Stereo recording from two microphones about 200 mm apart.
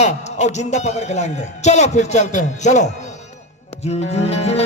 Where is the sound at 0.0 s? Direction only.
35° left (ahead or behind).